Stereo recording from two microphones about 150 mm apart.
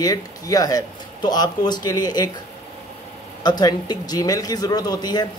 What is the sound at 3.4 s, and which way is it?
Speech, 25° left (ahead or behind).